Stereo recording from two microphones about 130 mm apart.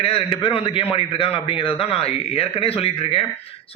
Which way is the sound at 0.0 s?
45° left (ahead or behind).